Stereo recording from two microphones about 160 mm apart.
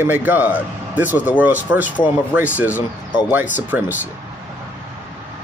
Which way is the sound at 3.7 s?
10° right (ahead or behind).